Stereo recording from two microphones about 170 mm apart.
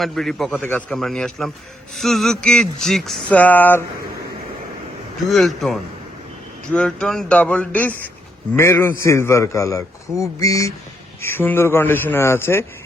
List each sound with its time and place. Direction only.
0.0 s speech: centre (ahead or behind)
5.3 s a man's voice: centre (ahead or behind)